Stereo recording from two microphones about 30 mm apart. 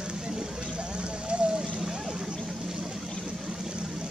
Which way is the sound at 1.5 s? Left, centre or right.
Right.